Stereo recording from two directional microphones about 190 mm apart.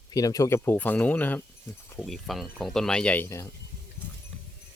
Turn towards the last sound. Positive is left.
turn(degrees=10)  # may be behind; listen again after turning